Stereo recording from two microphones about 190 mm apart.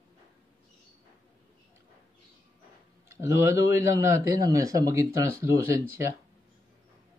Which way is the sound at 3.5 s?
15° right (ahead or behind).